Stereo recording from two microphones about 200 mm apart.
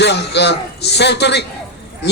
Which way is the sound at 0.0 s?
60° left (ahead or behind).